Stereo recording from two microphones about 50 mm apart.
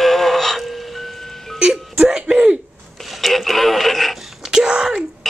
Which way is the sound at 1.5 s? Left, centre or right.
Centre.